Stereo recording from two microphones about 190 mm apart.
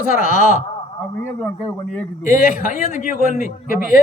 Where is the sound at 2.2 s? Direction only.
45° left (ahead or behind).